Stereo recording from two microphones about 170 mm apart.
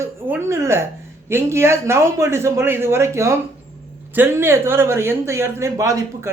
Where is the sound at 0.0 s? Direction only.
15° right (ahead or behind).